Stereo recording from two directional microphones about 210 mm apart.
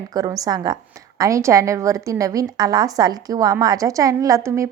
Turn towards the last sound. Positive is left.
turn(degrees=-15)  # may be behind; listen again after turning